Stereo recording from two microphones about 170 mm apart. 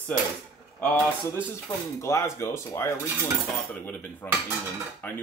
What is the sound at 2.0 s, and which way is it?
Speech, 15° left (ahead or behind).